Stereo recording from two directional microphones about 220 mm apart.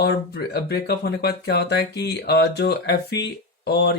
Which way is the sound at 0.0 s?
45° left (ahead or behind).